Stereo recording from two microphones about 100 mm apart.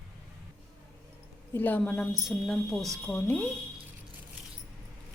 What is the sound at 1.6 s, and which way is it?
Speech, 20° left (ahead or behind).